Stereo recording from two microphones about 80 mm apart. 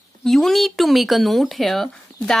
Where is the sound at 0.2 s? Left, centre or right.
Centre.